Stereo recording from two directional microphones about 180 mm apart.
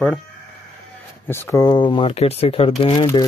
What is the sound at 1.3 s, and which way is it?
Speech, 15° left (ahead or behind).